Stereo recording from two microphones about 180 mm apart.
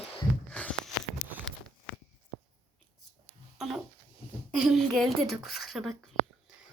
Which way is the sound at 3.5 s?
Centre (ahead or behind).